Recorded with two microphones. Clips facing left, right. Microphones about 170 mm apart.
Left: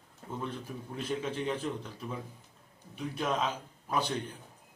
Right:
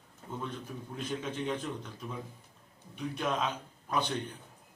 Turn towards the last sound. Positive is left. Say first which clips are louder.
# even
turn(degrees=10)  # may be behind; listen again after turning